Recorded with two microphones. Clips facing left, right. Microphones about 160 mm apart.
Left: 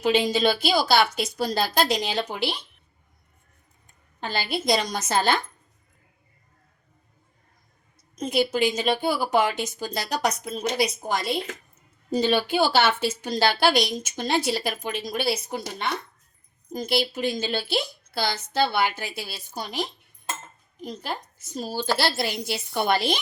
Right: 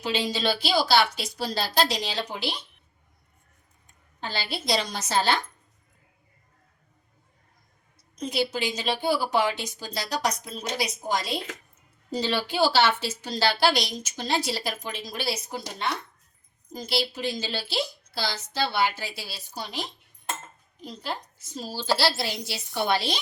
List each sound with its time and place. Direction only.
0.0 s a woman's voice: 55° left (ahead or behind)
4.2 s a woman's voice: 50° left (ahead or behind)
8.2 s a woman's voice: 50° left (ahead or behind)
16.7 s a woman's voice: 50° left (ahead or behind)
20.8 s a woman's voice: 50° left (ahead or behind)